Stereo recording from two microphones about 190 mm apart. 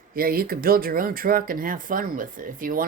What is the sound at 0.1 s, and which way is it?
Speech, 50° right (ahead or behind).